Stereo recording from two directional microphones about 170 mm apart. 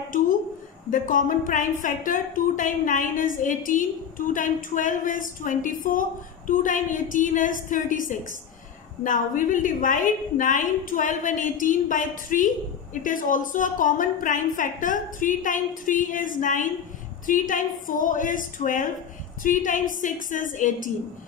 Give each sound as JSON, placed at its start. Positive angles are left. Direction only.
{"t": 0.8, "sound": "a woman's voice", "side_deg": 50}